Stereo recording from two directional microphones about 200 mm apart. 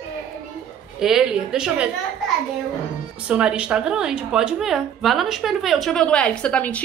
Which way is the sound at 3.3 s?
5° right (ahead or behind).